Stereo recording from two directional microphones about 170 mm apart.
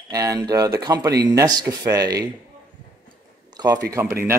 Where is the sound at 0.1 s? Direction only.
20° right (ahead or behind).